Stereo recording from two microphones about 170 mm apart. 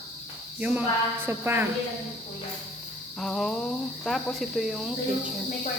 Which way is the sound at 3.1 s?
Centre (ahead or behind).